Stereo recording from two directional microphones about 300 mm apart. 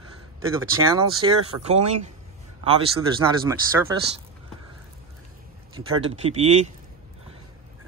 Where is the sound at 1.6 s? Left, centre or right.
Right.